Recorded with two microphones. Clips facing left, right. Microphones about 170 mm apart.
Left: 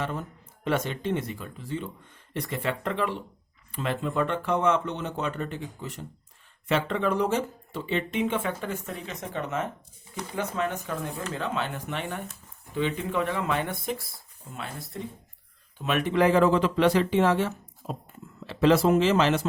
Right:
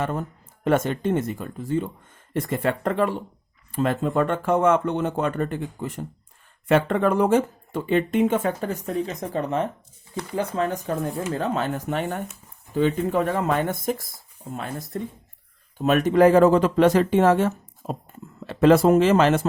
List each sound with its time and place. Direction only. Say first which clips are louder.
0.0 s speech: right 5 dB; 50° right (ahead or behind)